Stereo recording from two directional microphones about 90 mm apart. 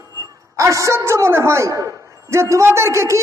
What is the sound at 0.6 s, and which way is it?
A woman's voice, 35° right (ahead or behind).